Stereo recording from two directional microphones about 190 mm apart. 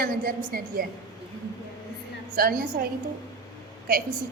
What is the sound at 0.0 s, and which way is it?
Speech, 50° right (ahead or behind).